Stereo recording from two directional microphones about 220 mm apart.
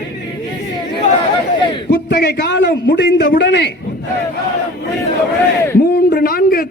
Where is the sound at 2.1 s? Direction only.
45° left (ahead or behind).